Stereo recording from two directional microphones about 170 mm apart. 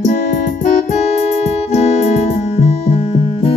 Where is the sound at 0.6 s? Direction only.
50° left (ahead or behind).